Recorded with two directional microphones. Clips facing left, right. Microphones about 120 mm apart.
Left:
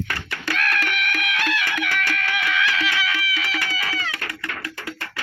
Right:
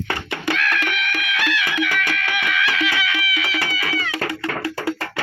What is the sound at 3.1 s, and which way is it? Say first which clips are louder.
Music: right 2 dB; 35° left (ahead or behind).